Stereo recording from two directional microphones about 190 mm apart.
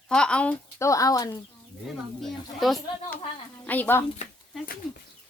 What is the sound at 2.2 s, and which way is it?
Speech, centre (ahead or behind).